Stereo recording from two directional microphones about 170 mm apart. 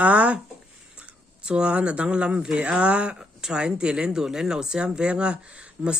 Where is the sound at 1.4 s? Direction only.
5° right (ahead or behind).